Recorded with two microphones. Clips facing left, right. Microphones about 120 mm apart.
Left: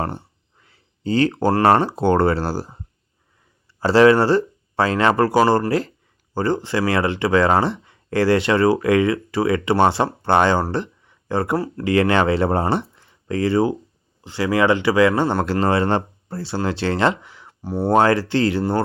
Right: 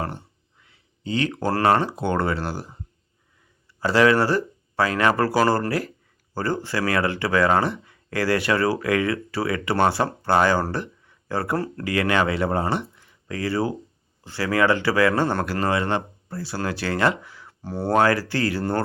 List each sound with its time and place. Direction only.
0.6 s speech: 35° left (ahead or behind)
3.8 s speech: 30° left (ahead or behind); by 17.9 s 15° left (ahead or behind)
17.9 s speech: 25° left (ahead or behind)